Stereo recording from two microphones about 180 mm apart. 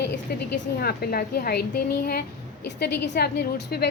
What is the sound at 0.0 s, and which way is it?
A woman's voice, 70° left (ahead or behind).